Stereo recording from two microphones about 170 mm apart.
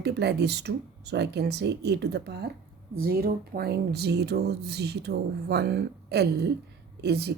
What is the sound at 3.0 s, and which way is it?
Speech, 60° right (ahead or behind).